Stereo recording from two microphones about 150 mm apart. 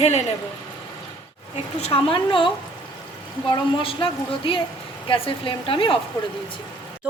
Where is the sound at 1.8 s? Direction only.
40° left (ahead or behind).